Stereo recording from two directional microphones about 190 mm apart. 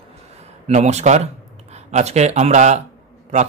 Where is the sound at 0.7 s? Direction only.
35° right (ahead or behind).